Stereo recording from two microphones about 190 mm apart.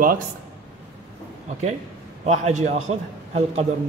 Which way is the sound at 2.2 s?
35° right (ahead or behind).